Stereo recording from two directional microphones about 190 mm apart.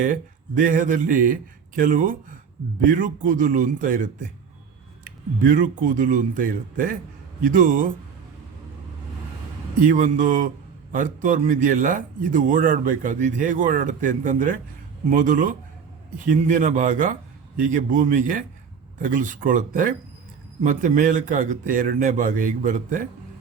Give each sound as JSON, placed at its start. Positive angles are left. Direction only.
{"t": 0.6, "sound": "a man's voice", "side_deg": -45}
{"t": 9.8, "sound": "a man's voice", "side_deg": -45}